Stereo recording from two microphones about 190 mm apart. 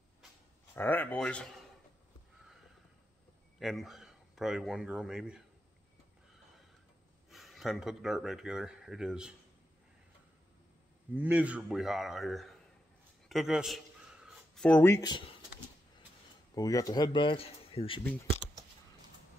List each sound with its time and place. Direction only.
0.7 s speech: 10° left (ahead or behind)
3.5 s speech: centre (ahead or behind)
7.2 s speech: centre (ahead or behind)
11.1 s a man's voice: 10° right (ahead or behind); by 15.3 s 25° left (ahead or behind)
16.5 s speech: 20° left (ahead or behind)